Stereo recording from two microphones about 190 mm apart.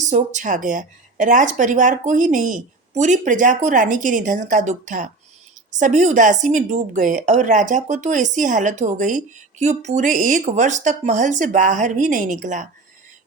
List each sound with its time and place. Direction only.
0.0 s a woman's voice: 40° right (ahead or behind)